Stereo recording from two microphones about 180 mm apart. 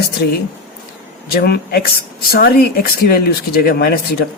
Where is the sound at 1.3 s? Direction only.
60° left (ahead or behind).